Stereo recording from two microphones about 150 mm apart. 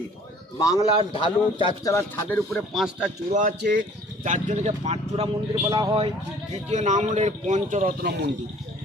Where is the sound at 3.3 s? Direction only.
60° right (ahead or behind).